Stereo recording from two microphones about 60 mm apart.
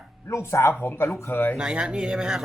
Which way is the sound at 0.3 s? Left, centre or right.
Left.